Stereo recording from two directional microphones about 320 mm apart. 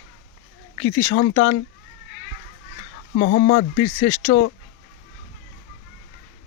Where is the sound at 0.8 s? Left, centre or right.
Left.